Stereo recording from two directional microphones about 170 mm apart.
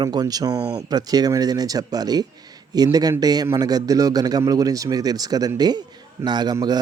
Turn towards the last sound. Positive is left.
turn(degrees=-25)  # may be behind; listen again after turning